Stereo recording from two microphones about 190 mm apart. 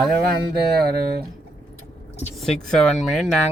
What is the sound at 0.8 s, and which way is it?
Speech, 55° right (ahead or behind).